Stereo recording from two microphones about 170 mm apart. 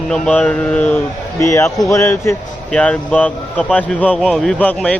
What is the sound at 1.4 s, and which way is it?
Speech, 20° left (ahead or behind).